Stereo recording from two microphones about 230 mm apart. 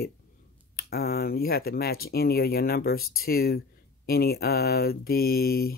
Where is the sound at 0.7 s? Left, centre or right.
Left.